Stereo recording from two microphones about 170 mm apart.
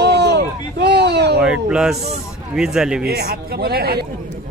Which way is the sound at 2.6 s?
5° right (ahead or behind).